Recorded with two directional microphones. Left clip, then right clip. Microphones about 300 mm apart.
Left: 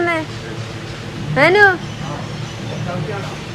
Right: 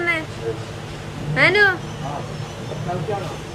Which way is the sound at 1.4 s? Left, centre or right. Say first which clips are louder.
Left 4 dB; centre.